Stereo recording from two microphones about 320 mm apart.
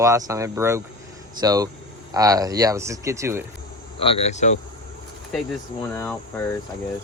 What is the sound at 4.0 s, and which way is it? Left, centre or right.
Speech, centre.